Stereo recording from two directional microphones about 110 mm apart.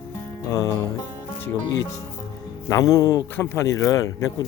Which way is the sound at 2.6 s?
30° left (ahead or behind).